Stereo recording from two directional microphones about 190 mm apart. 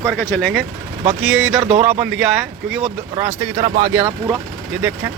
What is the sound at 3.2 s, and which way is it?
Speech, 15° right (ahead or behind).